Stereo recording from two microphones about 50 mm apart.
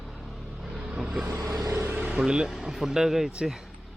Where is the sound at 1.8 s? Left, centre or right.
Right.